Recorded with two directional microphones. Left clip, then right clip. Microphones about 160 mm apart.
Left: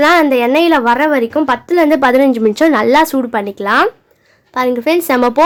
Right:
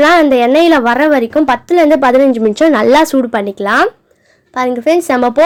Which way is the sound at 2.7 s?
20° right (ahead or behind).